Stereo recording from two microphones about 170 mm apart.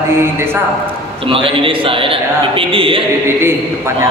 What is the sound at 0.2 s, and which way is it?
Speech, 15° right (ahead or behind).